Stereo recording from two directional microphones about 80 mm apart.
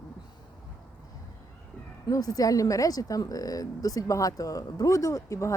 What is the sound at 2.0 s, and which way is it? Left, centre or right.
Speech, left.